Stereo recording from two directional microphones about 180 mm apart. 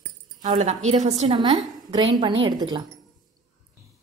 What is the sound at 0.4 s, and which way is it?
Speech, 45° right (ahead or behind).